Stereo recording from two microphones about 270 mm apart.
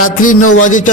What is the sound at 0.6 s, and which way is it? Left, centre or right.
Speech, left.